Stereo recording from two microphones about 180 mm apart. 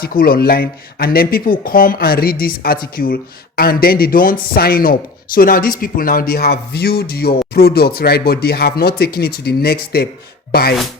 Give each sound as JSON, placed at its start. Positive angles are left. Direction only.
{"t": 0.0, "sound": "speech", "side_deg": 55}